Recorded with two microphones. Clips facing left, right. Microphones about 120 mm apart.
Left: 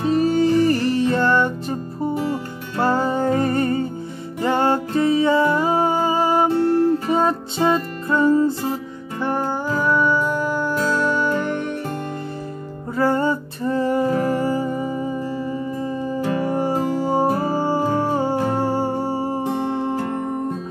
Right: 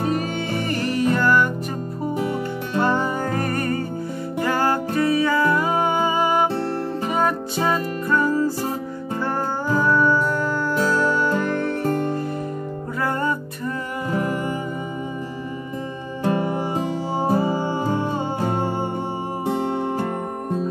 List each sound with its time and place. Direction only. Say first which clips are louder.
0.1 s music: left 8 dB; 35° left (ahead or behind)
2.8 s music: left 3 dB; 35° left (ahead or behind)
9.8 s music: right 1 dB; 15° left (ahead or behind)
13.0 s music: left 5 dB; 30° left (ahead or behind)
16.6 s music: left 4 dB; 45° left (ahead or behind)